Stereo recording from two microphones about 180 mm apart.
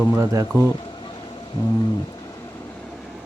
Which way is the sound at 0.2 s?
20° right (ahead or behind).